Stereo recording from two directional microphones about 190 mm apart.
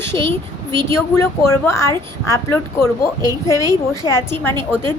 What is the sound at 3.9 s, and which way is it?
Speech, 15° left (ahead or behind).